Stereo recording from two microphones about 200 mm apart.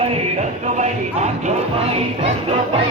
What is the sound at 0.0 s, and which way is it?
Music, 30° right (ahead or behind).